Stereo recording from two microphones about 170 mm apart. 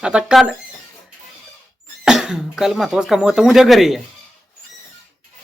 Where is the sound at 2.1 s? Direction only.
5° right (ahead or behind).